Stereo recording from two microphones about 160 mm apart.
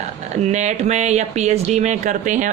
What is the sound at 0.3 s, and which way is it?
Speech, 45° right (ahead or behind).